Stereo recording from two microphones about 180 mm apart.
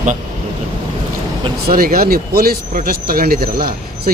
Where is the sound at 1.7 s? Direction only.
55° right (ahead or behind).